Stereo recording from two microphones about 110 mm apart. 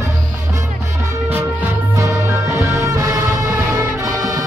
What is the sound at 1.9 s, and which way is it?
Music, 30° right (ahead or behind).